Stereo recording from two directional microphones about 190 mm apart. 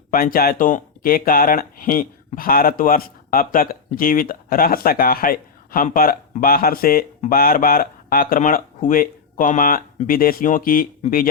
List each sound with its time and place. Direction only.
0.1 s speech: 50° left (ahead or behind)